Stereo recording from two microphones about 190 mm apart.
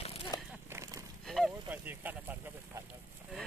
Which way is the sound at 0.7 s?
15° right (ahead or behind).